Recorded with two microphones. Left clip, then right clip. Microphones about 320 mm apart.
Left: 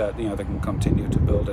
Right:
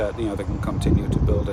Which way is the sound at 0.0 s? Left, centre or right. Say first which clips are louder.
Even; centre.